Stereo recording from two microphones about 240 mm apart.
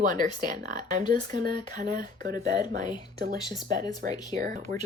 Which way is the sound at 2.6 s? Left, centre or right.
Right.